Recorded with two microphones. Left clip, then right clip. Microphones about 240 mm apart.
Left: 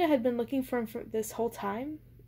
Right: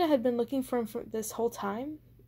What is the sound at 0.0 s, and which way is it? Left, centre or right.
Speech, right.